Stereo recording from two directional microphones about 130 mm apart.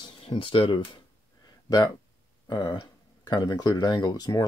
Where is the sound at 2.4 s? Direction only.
30° left (ahead or behind).